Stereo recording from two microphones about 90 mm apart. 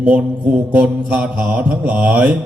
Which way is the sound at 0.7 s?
15° right (ahead or behind).